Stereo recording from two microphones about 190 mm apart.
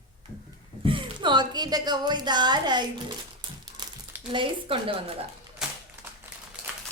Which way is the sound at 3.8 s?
20° right (ahead or behind).